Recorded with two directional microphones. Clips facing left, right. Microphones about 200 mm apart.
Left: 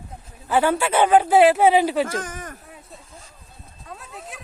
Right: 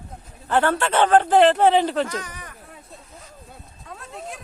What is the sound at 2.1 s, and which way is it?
Speech, 45° left (ahead or behind).